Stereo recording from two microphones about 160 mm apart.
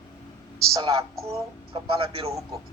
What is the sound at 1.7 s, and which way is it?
Speech, 35° right (ahead or behind).